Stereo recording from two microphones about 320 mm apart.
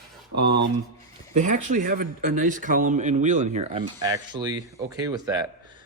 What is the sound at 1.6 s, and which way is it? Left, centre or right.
Speech, right.